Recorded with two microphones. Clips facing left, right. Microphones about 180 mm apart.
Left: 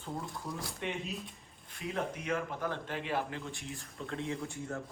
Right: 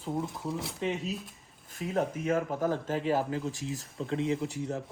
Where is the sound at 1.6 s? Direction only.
45° right (ahead or behind).